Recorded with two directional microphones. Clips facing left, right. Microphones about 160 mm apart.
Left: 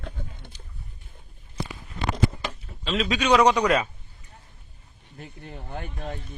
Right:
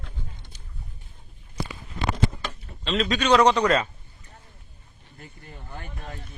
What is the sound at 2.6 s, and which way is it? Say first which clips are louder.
A man's voice: right 1 dB; centre (ahead or behind).